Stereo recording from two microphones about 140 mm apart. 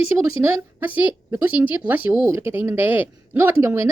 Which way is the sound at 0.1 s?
15° right (ahead or behind).